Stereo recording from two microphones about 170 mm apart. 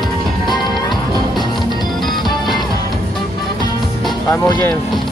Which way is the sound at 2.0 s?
Centre (ahead or behind).